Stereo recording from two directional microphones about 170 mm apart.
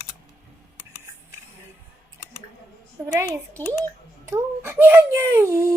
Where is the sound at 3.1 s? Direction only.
15° right (ahead or behind).